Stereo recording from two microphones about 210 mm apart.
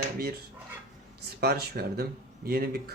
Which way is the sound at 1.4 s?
50° right (ahead or behind).